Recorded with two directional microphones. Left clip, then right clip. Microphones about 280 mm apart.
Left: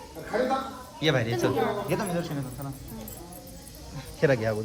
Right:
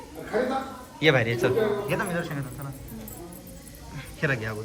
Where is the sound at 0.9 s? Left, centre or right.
Centre.